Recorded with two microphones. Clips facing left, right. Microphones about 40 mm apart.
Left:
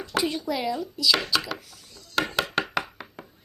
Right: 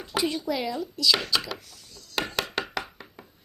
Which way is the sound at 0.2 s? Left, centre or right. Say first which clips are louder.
Left 1 dB; centre.